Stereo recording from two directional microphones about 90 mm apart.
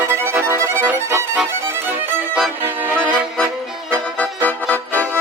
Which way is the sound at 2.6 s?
20° right (ahead or behind).